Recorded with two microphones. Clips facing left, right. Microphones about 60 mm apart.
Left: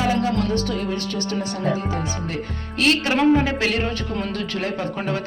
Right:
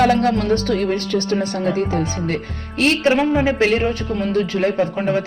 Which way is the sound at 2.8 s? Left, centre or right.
Right.